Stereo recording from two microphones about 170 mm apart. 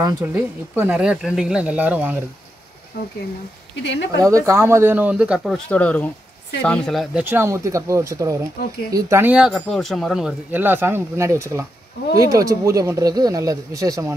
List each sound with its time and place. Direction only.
0.3 s speech: 10° right (ahead or behind)
3.8 s speech: 90° left
4.2 s speech: 20° right (ahead or behind); by 7.2 s centre (ahead or behind)
7.2 s speech: 15° right (ahead or behind)